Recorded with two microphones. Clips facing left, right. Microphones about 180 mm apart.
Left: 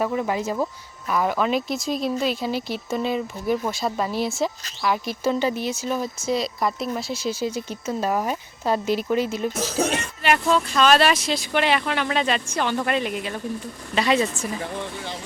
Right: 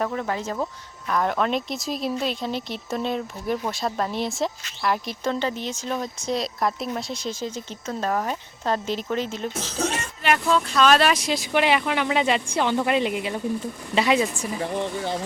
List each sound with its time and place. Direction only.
0.0 s speech: 10° left (ahead or behind)
10.8 s speech: centre (ahead or behind)
11.3 s speech: 10° right (ahead or behind)
14.0 s speech: 5° right (ahead or behind)